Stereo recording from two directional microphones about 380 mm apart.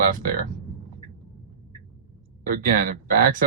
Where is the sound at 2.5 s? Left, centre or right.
Right.